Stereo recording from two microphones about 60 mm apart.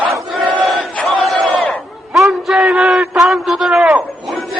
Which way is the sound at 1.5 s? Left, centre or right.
Left.